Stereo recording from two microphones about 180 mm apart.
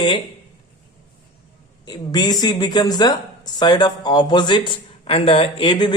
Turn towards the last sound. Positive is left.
turn(degrees=25)  # may be behind; listen again after turning